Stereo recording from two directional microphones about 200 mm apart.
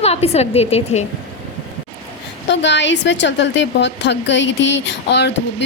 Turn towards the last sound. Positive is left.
turn(degrees=60)  # may be behind; listen again after turning